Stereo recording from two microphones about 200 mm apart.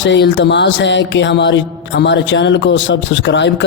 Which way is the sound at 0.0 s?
65° left (ahead or behind).